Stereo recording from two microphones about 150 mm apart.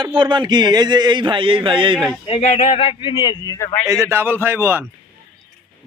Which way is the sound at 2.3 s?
45° left (ahead or behind).